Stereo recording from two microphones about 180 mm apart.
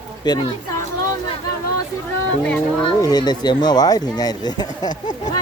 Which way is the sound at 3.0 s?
20° left (ahead or behind).